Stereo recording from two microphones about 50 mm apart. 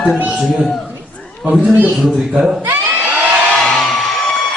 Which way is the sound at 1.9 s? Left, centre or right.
Centre.